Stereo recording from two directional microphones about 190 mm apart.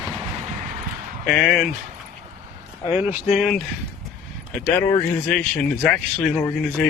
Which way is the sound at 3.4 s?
Centre (ahead or behind).